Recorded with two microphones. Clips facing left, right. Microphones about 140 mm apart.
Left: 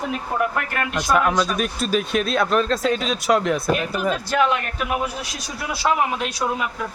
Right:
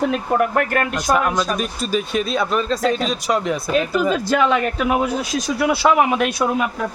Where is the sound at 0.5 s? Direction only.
45° right (ahead or behind).